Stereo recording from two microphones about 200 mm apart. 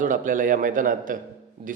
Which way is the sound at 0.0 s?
40° right (ahead or behind).